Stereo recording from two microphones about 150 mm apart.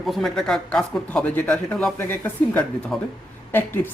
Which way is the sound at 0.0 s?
Centre (ahead or behind).